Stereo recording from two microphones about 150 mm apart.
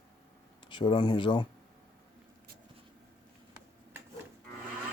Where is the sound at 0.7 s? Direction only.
30° left (ahead or behind).